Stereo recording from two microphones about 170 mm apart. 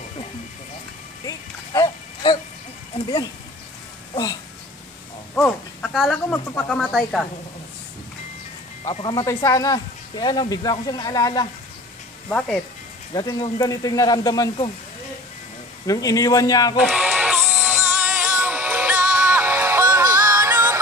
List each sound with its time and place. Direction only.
1.2 s a sound: 20° left (ahead or behind)
4.1 s speech: 25° left (ahead or behind)
5.3 s speech: 5° left (ahead or behind)
8.8 s speech: 35° left (ahead or behind)
9.1 s speech: 20° left (ahead or behind)
12.3 s speech: 5° left (ahead or behind)
13.1 s speech: 25° left (ahead or behind)
15.9 s speech: 20° left (ahead or behind)
16.7 s music: 5° right (ahead or behind)